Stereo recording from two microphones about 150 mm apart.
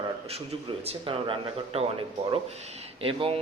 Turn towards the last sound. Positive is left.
turn(degrees=-35)  # may be behind; listen again after turning